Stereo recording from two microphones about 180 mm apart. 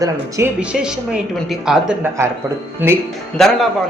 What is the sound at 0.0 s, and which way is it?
Speech, 15° right (ahead or behind).